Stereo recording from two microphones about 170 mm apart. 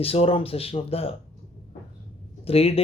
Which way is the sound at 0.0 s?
35° left (ahead or behind).